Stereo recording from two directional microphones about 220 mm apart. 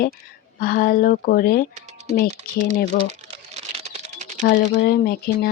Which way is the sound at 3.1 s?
30° right (ahead or behind).